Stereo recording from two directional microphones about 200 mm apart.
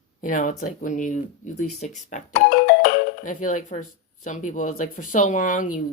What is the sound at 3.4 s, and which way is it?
Speech, 40° left (ahead or behind).